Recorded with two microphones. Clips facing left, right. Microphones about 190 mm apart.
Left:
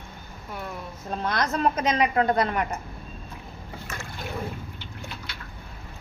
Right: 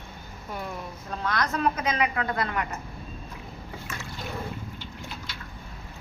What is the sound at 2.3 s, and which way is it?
Speech, 20° left (ahead or behind).